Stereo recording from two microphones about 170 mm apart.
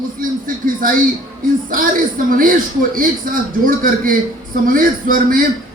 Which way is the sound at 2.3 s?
55° right (ahead or behind).